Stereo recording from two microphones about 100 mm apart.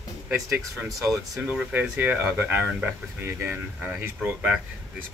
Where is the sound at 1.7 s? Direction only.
20° right (ahead or behind).